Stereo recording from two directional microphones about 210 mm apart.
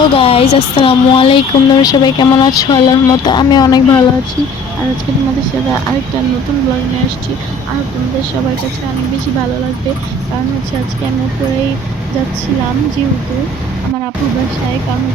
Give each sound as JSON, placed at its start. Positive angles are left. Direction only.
{"t": 0.2, "sound": "speech", "side_deg": 25}